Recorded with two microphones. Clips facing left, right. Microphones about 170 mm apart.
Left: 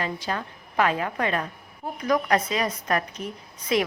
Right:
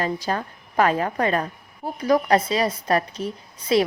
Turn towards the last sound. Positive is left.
turn(degrees=-30)  # may be behind; listen again after turning